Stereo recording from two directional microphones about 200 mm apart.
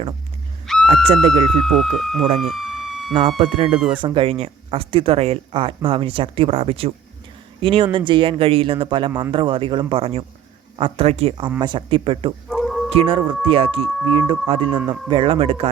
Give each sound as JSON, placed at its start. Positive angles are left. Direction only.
{"t": 0.7, "sound": "a sound", "side_deg": 0}
{"t": 1.5, "sound": "speech", "side_deg": 0}
{"t": 2.4, "sound": "police car", "side_deg": 0}
{"t": 3.2, "sound": "speech", "side_deg": -25}
{"t": 12.5, "sound": "dog", "side_deg": 0}
{"t": 12.9, "sound": "speech", "side_deg": -25}